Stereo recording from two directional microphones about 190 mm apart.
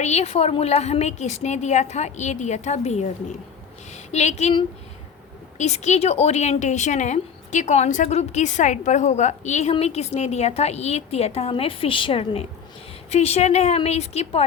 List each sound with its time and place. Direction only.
0.0 s a woman's voice: 35° left (ahead or behind)